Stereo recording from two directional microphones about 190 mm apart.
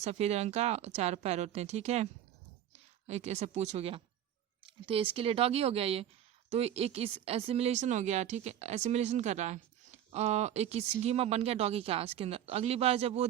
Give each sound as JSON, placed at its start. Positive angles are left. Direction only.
{"t": 0.0, "sound": "speech", "side_deg": -35}